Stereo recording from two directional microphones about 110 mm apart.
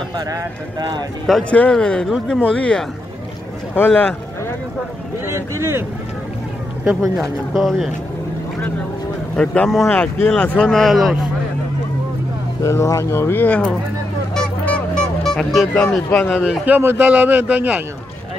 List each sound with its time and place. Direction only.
0.3 s speech: 35° right (ahead or behind)
1.5 s speech: 10° left (ahead or behind)
5.2 s speech: 25° right (ahead or behind)
7.0 s speech: 5° left (ahead or behind)
9.3 s speech: 10° left (ahead or behind)
12.6 s speech: 25° left (ahead or behind)
14.3 s music: 10° left (ahead or behind)
16.3 s a man's voice: 10° right (ahead or behind)